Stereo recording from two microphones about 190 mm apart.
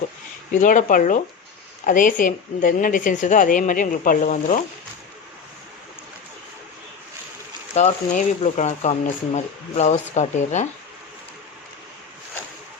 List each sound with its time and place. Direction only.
0.5 s a woman's voice: 40° left (ahead or behind)
7.7 s speech: 35° left (ahead or behind)